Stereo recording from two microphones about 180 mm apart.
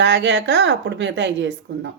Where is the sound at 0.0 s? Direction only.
75° right (ahead or behind).